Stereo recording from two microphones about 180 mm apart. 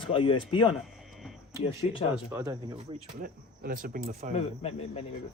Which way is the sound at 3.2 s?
50° right (ahead or behind).